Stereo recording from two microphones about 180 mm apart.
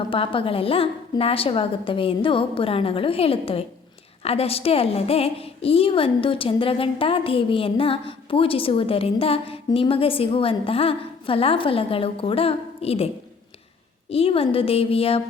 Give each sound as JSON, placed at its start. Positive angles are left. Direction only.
{"t": 0.1, "sound": "a woman's voice", "side_deg": 30}
{"t": 14.1, "sound": "a woman's voice", "side_deg": 30}